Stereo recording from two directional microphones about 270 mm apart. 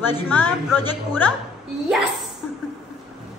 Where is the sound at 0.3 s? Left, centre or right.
Centre.